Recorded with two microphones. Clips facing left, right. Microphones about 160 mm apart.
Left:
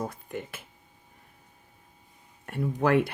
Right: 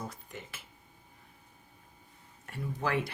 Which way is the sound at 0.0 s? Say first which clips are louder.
Left 9 dB; 55° left (ahead or behind).